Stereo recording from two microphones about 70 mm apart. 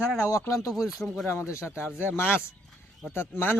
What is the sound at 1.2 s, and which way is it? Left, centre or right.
Speech, left.